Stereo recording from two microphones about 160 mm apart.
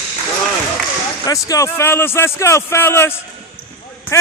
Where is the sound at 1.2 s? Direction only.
20° left (ahead or behind).